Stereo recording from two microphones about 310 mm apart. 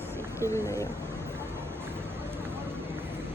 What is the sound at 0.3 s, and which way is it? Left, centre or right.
Speech, centre.